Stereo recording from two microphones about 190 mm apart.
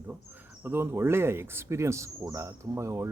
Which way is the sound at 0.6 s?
10° right (ahead or behind).